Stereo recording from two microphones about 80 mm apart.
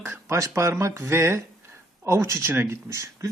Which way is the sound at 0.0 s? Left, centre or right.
Right.